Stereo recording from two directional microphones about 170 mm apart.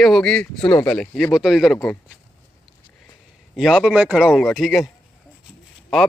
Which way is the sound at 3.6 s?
Centre (ahead or behind).